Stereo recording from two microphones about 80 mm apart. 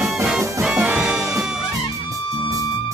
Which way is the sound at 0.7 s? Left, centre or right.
Centre.